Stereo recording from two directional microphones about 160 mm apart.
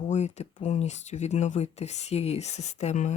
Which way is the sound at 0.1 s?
45° left (ahead or behind).